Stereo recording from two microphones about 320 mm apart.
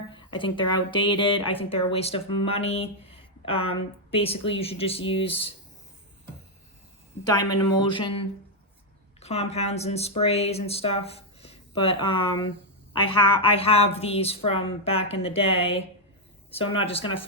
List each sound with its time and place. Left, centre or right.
0.1 s speech: centre
7.8 s speech: centre
9.2 s speech: centre